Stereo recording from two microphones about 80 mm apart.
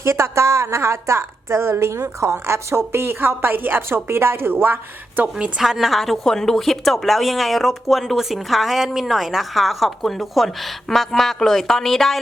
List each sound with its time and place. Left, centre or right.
0.0 s a woman's voice: right
5.5 s a woman's voice: centre